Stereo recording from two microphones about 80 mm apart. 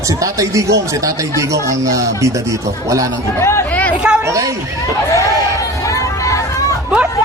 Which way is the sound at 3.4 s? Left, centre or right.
Left.